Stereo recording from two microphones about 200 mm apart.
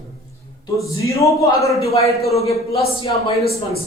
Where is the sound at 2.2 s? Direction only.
30° left (ahead or behind).